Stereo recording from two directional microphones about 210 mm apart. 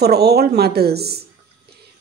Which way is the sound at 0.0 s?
50° right (ahead or behind).